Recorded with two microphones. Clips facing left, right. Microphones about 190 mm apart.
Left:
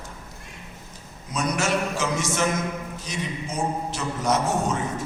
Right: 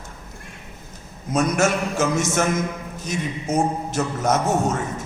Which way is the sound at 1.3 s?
45° right (ahead or behind).